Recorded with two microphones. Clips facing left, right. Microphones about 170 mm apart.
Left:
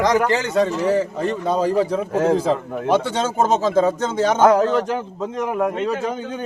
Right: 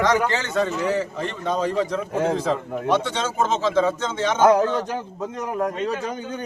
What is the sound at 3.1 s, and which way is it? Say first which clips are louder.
A man's voice: left 4 dB; 40° left (ahead or behind).